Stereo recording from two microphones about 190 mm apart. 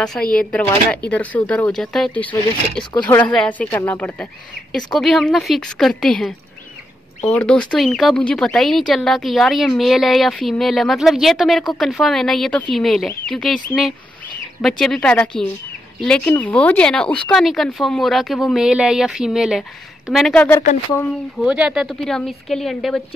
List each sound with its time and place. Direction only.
0.3 s speech: 5° left (ahead or behind)
2.8 s speech: 25° left (ahead or behind)
3.3 s speech: 5° left (ahead or behind)
14.6 s speech: 5° left (ahead or behind)